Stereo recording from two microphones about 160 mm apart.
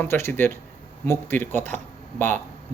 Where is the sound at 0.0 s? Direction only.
15° left (ahead or behind).